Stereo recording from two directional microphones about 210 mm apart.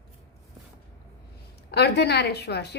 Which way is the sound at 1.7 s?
50° left (ahead or behind).